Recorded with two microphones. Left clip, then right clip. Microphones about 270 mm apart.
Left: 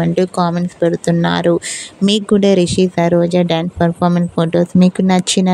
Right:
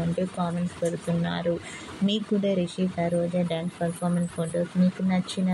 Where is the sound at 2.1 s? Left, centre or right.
Left.